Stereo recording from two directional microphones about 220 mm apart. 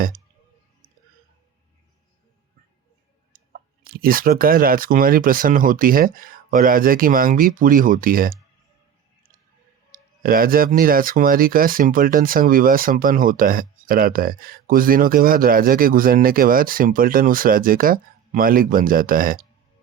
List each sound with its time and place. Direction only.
3.8 s speech: 40° right (ahead or behind)
9.9 s speech: 40° right (ahead or behind)